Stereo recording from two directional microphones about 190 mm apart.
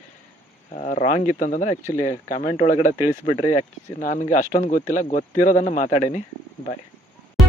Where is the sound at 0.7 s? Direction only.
40° left (ahead or behind).